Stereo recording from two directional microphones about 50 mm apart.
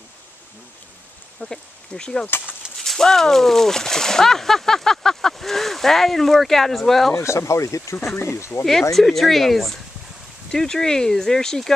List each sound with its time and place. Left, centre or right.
1.4 s speech: centre
7.2 s speech: left
8.2 s speech: left
8.9 s speech: centre